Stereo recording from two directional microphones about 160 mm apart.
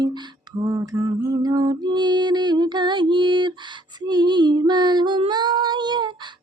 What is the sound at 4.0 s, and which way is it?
Female singing, 25° right (ahead or behind).